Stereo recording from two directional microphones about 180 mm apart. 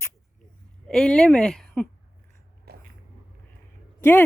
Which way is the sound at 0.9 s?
5° left (ahead or behind).